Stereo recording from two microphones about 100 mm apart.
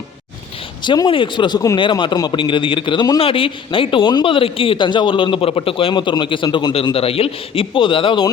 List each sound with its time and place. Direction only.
0.9 s a man's voice: 55° left (ahead or behind)
1.5 s speech: 40° left (ahead or behind)
1.8 s a man's voice: 50° left (ahead or behind)
3.2 s a man's voice: 65° left (ahead or behind)
5.9 s a man's voice: 50° left (ahead or behind)
6.9 s a man's voice: 70° left (ahead or behind)